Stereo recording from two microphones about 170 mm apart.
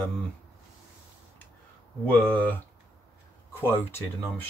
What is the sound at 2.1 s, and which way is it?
Speech, 10° left (ahead or behind).